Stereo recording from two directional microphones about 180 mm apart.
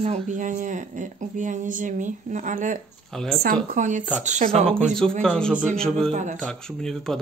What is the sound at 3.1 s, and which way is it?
Speech, centre (ahead or behind).